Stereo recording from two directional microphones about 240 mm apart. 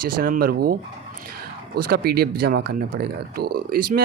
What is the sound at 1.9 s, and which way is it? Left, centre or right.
A man's voice, right.